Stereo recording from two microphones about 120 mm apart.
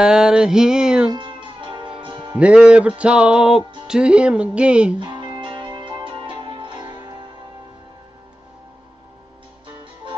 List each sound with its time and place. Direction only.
0.0 s music: 5° right (ahead or behind)
1.1 s music: 45° right (ahead or behind)
2.3 s music: 10° right (ahead or behind)
4.9 s music: 40° right (ahead or behind)